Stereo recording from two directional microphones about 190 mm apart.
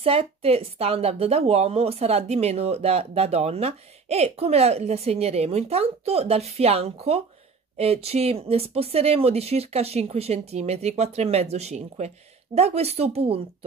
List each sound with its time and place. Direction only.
0.0 s speech: 30° right (ahead or behind)